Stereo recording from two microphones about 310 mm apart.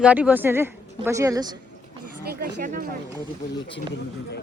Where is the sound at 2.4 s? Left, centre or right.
Right.